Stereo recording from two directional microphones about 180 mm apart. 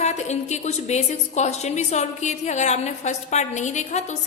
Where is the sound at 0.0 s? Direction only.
40° left (ahead or behind).